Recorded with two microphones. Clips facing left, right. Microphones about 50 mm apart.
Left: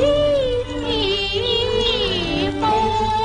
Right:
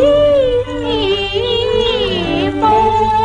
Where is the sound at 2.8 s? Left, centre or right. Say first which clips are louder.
Right 7 dB; right.